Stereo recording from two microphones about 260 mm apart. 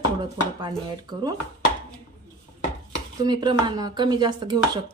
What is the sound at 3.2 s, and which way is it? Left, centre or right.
A woman's voice, centre.